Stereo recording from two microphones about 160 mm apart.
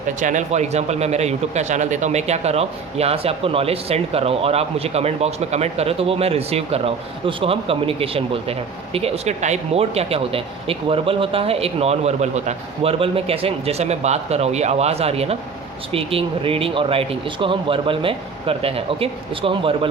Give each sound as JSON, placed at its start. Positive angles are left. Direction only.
{"t": 0.2, "sound": "a man's voice", "side_deg": -50}